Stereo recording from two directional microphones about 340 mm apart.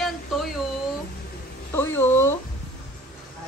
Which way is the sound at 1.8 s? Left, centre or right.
Centre.